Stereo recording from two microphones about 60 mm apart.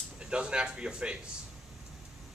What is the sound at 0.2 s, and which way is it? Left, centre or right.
Speech, centre.